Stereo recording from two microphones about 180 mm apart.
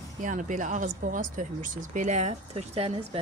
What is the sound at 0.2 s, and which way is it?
Speech, 45° right (ahead or behind).